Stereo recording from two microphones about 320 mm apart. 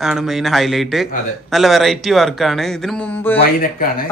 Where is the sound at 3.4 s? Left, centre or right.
Left.